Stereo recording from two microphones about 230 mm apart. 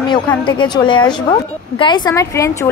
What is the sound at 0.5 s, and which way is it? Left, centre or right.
A woman's voice, left.